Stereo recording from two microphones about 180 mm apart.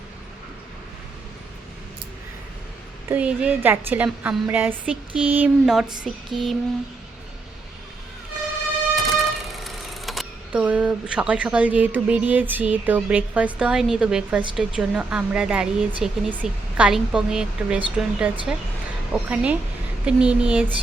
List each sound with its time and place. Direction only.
3.1 s a woman's voice: 5° right (ahead or behind)
9.0 s a woman's voice: centre (ahead or behind)